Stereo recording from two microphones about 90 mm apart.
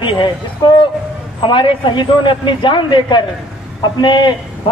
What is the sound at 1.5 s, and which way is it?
A man's voice, 65° left (ahead or behind).